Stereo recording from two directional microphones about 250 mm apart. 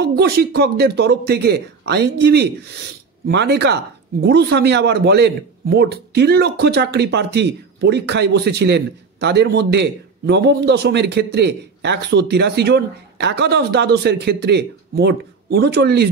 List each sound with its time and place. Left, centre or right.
0.0 s speech: right